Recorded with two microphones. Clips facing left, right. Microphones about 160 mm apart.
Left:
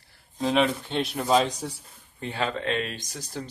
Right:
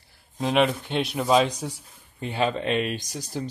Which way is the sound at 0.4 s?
15° right (ahead or behind).